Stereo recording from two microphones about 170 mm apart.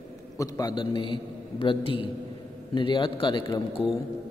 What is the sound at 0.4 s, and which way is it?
A man's voice, 20° left (ahead or behind).